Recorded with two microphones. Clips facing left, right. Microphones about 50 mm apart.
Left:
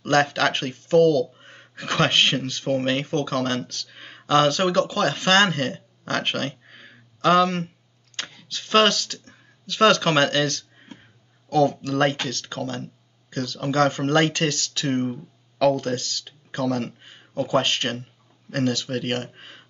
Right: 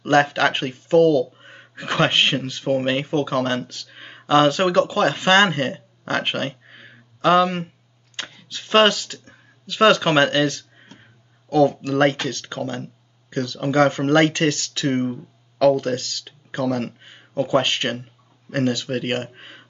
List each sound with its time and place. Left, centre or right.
0.0 s speech: centre
5.8 s a sound: centre
8.2 s speech: centre
11.0 s a sound: centre
11.8 s speech: right
15.0 s speech: centre
15.9 s speech: right